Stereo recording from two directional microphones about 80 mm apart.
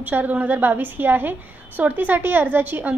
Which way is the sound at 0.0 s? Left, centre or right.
Right.